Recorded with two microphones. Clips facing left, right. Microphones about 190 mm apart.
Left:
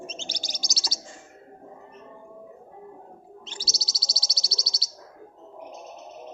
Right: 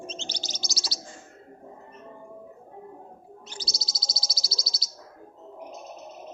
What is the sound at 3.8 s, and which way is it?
Bird, 90° right.